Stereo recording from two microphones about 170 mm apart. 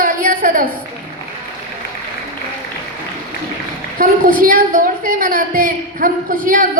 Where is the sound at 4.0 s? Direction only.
55° right (ahead or behind).